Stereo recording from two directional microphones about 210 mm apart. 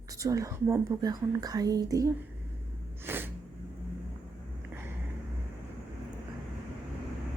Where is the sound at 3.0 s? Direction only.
10° right (ahead or behind).